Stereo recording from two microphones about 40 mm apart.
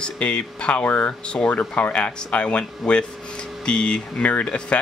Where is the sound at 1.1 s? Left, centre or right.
Left.